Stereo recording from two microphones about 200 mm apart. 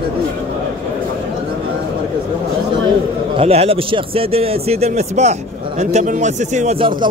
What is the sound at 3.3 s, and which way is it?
A man's voice, 30° right (ahead or behind).